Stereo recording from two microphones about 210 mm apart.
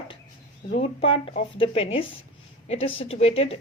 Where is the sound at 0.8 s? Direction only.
25° left (ahead or behind).